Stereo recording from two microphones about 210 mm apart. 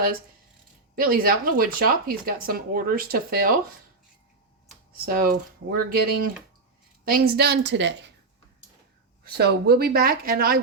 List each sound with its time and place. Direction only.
0.9 s speech: 45° right (ahead or behind)
5.0 s speech: 45° right (ahead or behind)
9.2 s speech: 50° right (ahead or behind)